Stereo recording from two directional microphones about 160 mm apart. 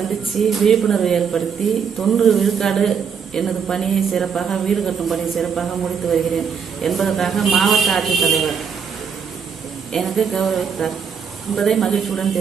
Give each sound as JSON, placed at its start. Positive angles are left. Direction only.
{"t": 0.4, "sound": "speech", "side_deg": 0}
{"t": 9.9, "sound": "speech", "side_deg": 0}